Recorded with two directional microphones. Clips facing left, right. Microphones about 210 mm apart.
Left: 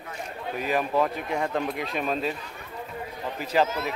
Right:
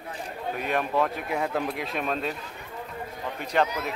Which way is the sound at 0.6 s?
Centre (ahead or behind).